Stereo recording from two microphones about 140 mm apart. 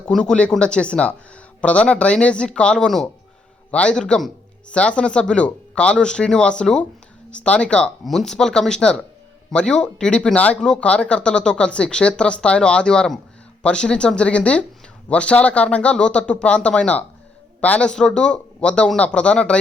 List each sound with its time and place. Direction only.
0.0 s speech: 5° left (ahead or behind)